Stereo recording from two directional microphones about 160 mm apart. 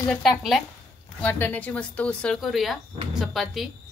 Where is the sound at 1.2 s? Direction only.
10° left (ahead or behind).